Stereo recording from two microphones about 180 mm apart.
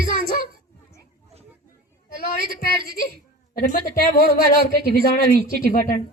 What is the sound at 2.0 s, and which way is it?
A woman's voice, 55° left (ahead or behind).